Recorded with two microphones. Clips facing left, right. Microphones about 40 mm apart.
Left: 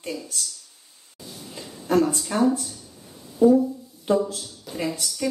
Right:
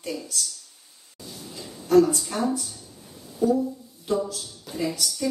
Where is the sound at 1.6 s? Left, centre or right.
Left.